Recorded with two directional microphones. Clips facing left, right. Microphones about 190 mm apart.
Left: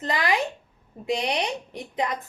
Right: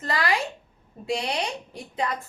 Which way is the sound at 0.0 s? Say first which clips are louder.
Left 1 dB; 20° left (ahead or behind).